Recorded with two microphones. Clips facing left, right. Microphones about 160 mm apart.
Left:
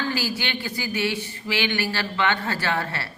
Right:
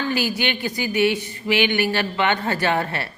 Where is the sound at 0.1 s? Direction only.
15° right (ahead or behind).